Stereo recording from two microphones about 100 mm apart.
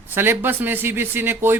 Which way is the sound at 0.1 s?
20° right (ahead or behind).